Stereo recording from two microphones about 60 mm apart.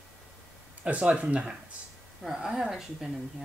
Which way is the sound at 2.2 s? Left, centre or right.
Centre.